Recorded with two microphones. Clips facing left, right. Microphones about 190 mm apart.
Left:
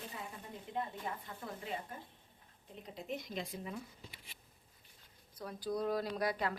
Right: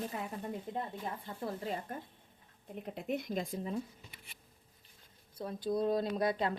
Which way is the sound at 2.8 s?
60° right (ahead or behind).